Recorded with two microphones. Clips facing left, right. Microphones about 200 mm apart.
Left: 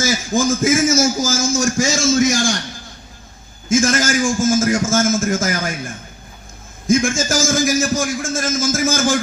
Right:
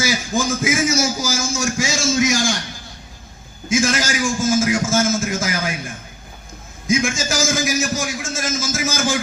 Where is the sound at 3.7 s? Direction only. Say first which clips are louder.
Left 3 dB; 50° left (ahead or behind).